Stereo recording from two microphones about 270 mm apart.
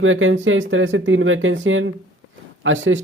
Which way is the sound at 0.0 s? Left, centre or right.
Right.